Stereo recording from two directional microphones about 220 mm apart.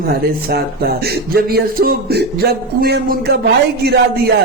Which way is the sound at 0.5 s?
45° right (ahead or behind).